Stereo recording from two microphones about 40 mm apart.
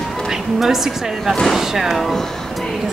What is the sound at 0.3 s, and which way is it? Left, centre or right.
A woman's voice, centre.